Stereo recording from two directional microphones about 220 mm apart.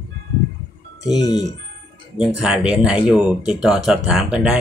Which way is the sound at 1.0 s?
15° left (ahead or behind).